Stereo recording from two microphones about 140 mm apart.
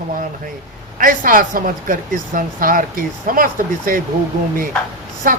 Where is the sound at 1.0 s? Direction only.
80° right.